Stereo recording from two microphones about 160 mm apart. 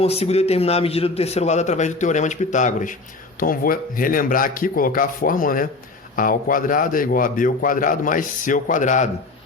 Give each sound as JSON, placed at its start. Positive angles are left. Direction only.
{"t": 0.0, "sound": "a man's voice", "side_deg": 40}
{"t": 3.4, "sound": "speech", "side_deg": 65}